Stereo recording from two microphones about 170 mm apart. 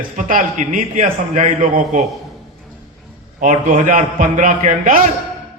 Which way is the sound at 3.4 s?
50° right (ahead or behind).